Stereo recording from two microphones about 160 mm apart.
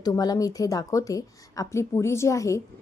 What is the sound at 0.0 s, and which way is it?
A woman's voice, 25° left (ahead or behind).